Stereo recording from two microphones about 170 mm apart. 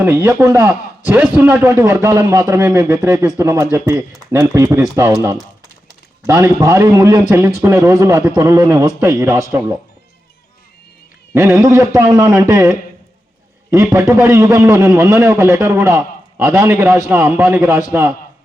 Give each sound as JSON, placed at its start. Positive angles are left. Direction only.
{"t": 0.0, "sound": "a man's voice", "side_deg": -15}
{"t": 11.3, "sound": "a man's voice", "side_deg": -15}